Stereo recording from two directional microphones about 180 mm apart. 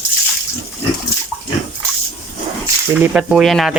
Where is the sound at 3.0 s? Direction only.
5° right (ahead or behind).